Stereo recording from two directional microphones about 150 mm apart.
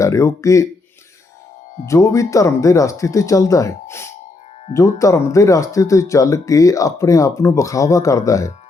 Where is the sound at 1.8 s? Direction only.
20° left (ahead or behind).